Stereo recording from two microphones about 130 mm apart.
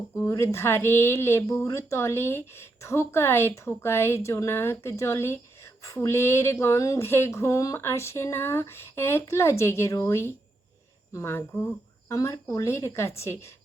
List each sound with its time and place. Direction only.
0.3 s speech: 20° left (ahead or behind)